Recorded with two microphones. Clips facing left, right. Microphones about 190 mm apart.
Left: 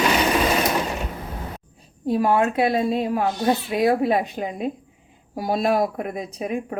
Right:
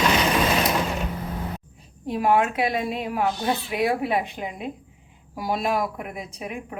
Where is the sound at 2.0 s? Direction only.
35° left (ahead or behind).